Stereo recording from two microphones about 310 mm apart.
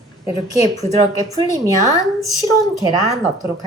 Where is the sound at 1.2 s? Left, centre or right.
Centre.